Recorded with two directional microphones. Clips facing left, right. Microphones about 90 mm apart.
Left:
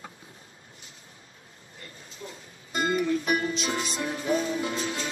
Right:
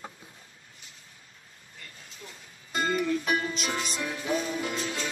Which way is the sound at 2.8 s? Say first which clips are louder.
Left 2 dB; 25° left (ahead or behind).